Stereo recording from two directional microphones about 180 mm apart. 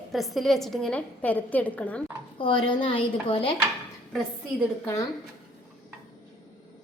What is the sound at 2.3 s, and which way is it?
A woman's voice, 30° left (ahead or behind).